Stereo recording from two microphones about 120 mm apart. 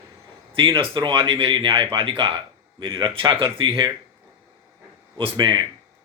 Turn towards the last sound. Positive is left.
turn(degrees=-40)  # may be behind; listen again after turning